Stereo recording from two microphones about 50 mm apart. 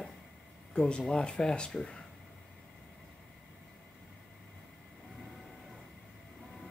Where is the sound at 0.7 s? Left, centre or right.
Centre.